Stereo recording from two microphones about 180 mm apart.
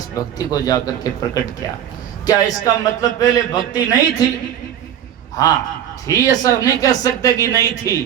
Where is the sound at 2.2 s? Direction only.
20° left (ahead or behind).